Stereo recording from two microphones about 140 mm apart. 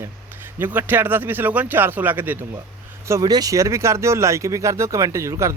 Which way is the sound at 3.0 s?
25° right (ahead or behind).